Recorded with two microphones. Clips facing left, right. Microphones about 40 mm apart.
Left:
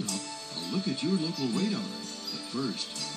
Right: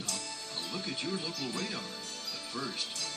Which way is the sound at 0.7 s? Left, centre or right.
Centre.